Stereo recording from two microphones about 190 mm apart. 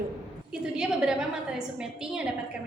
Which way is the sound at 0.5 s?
5° right (ahead or behind).